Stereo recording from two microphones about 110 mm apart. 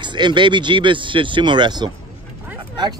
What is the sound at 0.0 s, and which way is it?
Speech, 45° right (ahead or behind).